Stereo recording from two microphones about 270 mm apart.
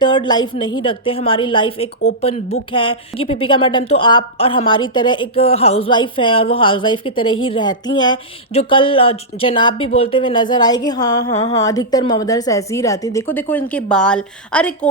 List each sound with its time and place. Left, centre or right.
0.0 s a woman's voice: centre